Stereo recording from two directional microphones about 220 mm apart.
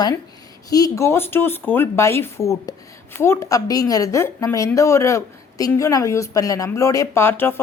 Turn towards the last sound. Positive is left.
turn(degrees=10)  # may be behind; listen again after turning